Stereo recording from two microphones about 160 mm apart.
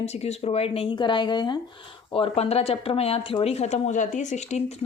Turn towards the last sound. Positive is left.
turn(degrees=45)  # may be behind; listen again after turning